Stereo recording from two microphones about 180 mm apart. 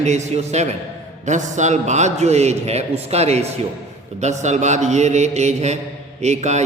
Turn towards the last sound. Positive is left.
turn(degrees=-40)  # may be behind; listen again after turning